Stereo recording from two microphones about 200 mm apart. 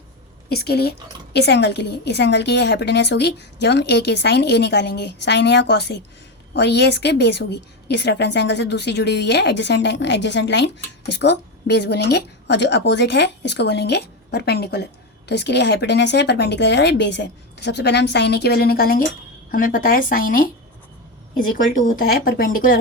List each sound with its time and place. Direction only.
0.5 s a woman's voice: 55° left (ahead or behind)
21.8 s a woman's voice: 45° left (ahead or behind)